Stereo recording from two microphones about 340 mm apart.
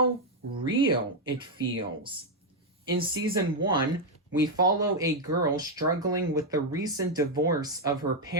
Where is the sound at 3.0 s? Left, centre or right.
Centre.